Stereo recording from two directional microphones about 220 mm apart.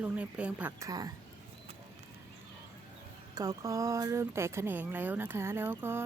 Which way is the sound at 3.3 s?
15° right (ahead or behind).